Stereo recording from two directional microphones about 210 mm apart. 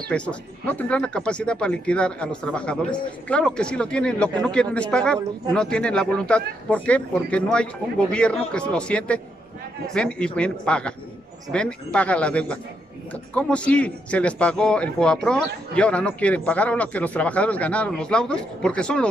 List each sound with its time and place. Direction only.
0.1 s a man's voice: 5° left (ahead or behind)